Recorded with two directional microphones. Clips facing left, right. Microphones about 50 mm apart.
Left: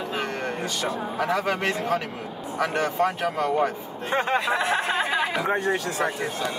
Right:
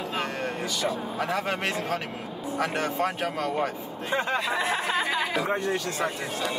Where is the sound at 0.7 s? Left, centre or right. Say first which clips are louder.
Left 1 dB; left.